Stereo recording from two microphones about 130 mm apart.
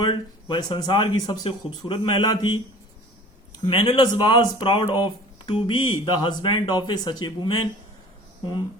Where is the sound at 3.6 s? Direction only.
40° left (ahead or behind).